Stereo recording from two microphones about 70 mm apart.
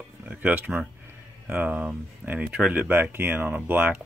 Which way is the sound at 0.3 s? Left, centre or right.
Right.